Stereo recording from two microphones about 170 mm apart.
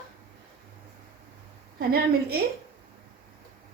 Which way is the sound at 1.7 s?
65° right (ahead or behind).